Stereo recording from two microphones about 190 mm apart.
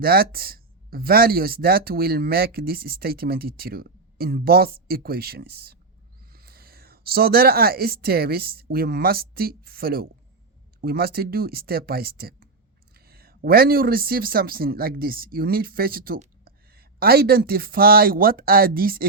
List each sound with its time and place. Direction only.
0.0 s speech: 50° right (ahead or behind)